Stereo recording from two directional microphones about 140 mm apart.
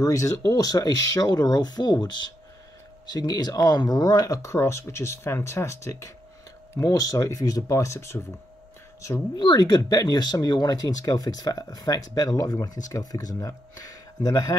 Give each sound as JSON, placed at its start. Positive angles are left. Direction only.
{"t": 0.0, "sound": "speech", "side_deg": 25}
{"t": 3.1, "sound": "speech", "side_deg": 30}
{"t": 9.4, "sound": "speech", "side_deg": 30}